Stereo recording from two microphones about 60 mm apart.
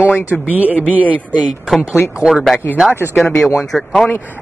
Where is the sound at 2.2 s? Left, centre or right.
Centre.